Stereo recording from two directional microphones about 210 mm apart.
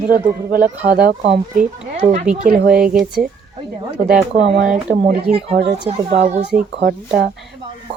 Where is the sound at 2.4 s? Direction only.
45° right (ahead or behind).